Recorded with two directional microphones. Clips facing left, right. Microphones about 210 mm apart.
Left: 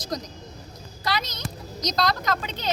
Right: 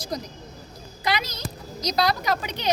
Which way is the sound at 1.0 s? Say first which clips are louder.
Right 2 dB; 15° right (ahead or behind).